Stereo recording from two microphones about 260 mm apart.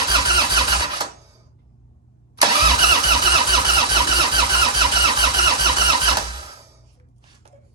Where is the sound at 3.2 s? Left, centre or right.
Centre.